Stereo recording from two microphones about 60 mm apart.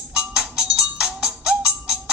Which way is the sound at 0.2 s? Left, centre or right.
Centre.